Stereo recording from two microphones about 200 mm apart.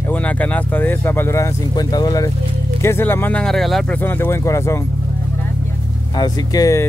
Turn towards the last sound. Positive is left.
turn(degrees=15)  # may be behind; listen again after turning